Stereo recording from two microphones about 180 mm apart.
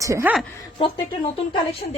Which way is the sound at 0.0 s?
15° right (ahead or behind).